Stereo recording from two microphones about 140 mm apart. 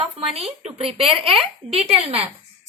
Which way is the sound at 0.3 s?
45° right (ahead or behind).